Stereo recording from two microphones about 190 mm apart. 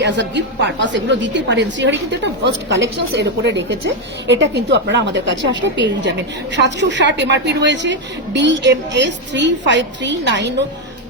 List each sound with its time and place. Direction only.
0.0 s a woman's voice: 65° right (ahead or behind)